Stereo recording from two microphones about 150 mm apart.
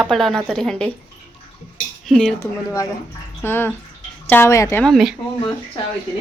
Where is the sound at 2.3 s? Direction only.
20° left (ahead or behind).